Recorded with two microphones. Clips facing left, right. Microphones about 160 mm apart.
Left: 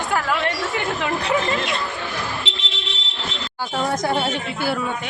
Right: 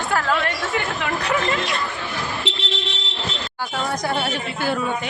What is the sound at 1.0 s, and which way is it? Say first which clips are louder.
Speech: left 2 dB; 25° left (ahead or behind).